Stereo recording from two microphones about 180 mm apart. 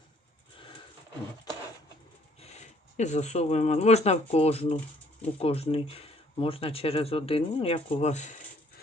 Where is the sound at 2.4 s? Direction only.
35° left (ahead or behind).